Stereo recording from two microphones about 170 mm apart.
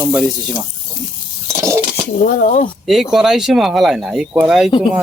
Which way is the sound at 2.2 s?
50° left (ahead or behind).